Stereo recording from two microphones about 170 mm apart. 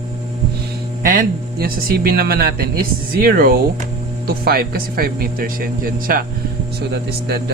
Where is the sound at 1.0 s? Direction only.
55° right (ahead or behind).